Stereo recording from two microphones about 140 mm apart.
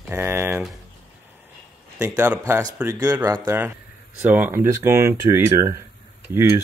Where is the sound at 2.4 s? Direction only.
25° right (ahead or behind).